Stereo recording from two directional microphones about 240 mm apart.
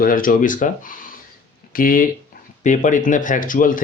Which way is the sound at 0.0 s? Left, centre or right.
Left.